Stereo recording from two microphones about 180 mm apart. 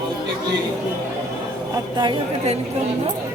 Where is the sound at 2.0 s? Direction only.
30° right (ahead or behind).